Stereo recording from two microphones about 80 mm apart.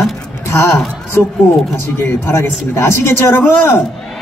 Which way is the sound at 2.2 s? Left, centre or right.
Left.